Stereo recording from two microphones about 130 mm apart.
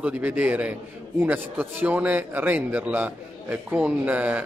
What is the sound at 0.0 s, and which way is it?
A man's voice, 15° right (ahead or behind).